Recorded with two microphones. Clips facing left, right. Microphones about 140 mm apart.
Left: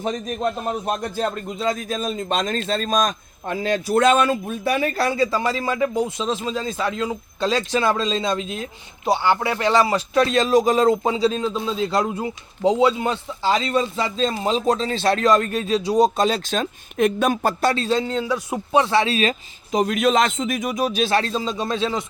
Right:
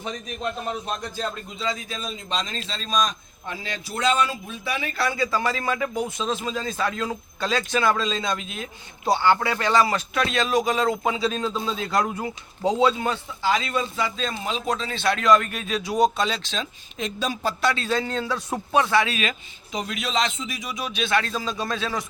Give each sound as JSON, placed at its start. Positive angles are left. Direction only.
{"t": 0.0, "sound": "a man's voice", "side_deg": 45}
{"t": 5.3, "sound": "speech", "side_deg": 25}
{"t": 6.6, "sound": "speech", "side_deg": 15}
{"t": 9.0, "sound": "speech", "side_deg": 20}
{"t": 11.3, "sound": "a man's voice", "side_deg": 20}